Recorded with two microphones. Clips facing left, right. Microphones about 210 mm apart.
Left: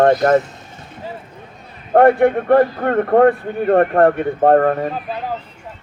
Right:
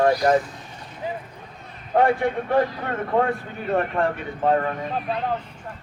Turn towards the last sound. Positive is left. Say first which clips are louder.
# left 2 dB
turn(degrees=5)  # may be behind; listen again after turning